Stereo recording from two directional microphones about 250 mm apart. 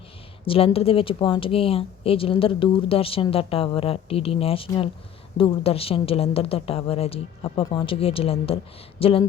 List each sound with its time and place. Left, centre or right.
0.4 s a woman's voice: left